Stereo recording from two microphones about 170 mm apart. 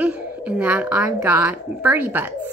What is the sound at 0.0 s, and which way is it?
A woman's voice, 10° right (ahead or behind).